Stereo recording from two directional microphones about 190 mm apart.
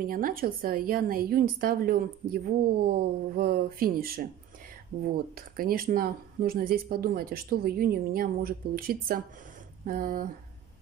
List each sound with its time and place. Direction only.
0.0 s a woman's voice: 50° right (ahead or behind)